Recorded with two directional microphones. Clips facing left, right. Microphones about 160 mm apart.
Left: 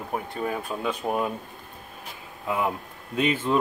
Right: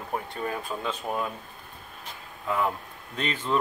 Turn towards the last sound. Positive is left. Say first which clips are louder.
# left 5 dB
turn(degrees=10)  # may be behind; listen again after turning